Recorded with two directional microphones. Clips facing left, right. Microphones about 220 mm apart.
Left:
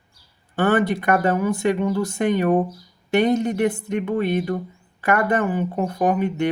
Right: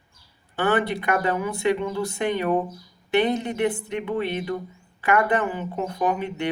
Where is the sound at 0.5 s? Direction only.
45° left (ahead or behind).